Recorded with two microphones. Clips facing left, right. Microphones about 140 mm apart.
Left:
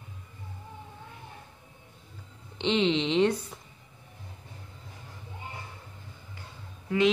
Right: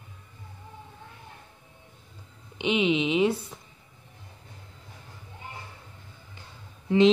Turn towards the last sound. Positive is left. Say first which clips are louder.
# right 5 dB
turn(degrees=-25)  # may be behind; listen again after turning